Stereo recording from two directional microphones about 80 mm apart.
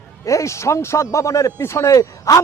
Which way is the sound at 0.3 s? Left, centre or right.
Left.